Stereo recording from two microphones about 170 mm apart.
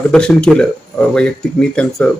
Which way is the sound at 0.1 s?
5° left (ahead or behind).